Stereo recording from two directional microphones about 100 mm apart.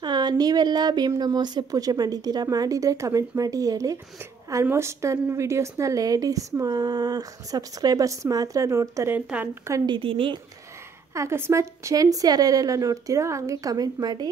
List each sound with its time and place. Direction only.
0.0 s speech: 45° right (ahead or behind); by 9.1 s 30° right (ahead or behind)
9.1 s speech: 15° right (ahead or behind)
9.8 s speech: 60° right (ahead or behind)
11.1 s speech: 25° right (ahead or behind); by 14.3 s 40° right (ahead or behind)